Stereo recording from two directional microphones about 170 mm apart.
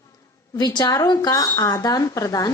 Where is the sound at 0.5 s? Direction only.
25° left (ahead or behind).